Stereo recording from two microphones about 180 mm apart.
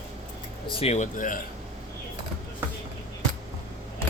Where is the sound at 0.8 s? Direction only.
40° left (ahead or behind).